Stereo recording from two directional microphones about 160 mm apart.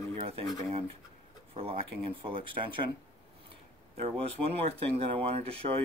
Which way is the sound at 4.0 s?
40° right (ahead or behind).